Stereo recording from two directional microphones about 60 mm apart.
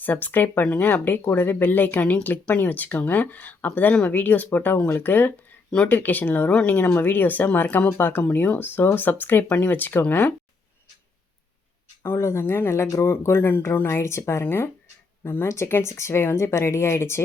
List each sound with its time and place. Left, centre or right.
0.0 s speech: left
6.5 s speech: centre
6.7 s speech: left
12.0 s speech: left